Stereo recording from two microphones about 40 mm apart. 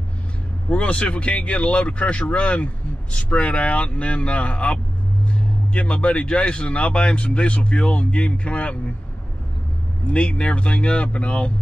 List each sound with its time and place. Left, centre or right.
0.7 s speech: left
10.1 s speech: left